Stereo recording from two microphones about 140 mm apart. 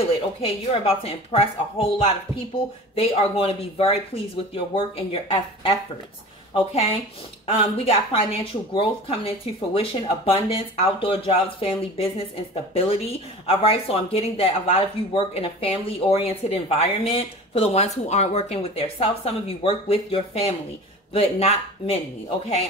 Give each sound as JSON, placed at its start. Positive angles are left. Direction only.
{"t": 0.4, "sound": "speech", "side_deg": 45}